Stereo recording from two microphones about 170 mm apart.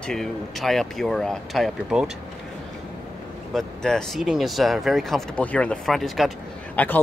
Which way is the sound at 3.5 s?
5° left (ahead or behind).